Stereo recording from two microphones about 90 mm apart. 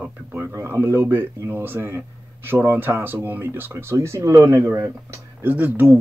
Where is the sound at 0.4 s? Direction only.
30° right (ahead or behind).